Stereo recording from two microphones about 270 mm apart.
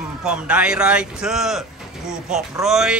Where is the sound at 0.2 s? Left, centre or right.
Centre.